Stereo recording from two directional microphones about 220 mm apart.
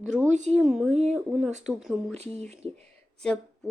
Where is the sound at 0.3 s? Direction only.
30° right (ahead or behind).